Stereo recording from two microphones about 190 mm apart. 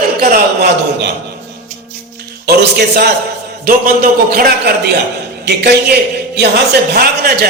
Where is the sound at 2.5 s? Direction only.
55° right (ahead or behind).